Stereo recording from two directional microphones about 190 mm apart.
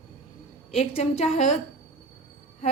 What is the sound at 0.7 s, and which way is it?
Speech, 30° left (ahead or behind).